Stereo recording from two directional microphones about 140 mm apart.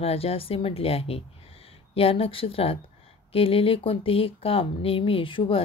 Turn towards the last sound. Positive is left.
turn(degrees=40)  # may be behind; listen again after turning